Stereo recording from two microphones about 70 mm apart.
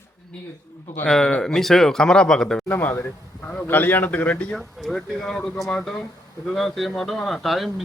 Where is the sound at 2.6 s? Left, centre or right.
Left.